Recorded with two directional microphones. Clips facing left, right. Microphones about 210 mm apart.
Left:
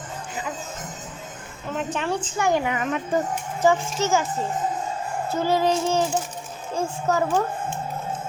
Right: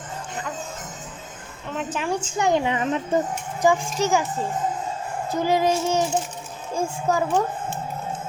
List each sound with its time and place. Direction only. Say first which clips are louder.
1.7 s a woman's voice: left 1 dB; centre (ahead or behind)
2.0 s a woman's voice: right 2 dB; 15° right (ahead or behind)
3.6 s child singing: even; 15° right (ahead or behind)
5.3 s child singing: right 1 dB; 15° right (ahead or behind)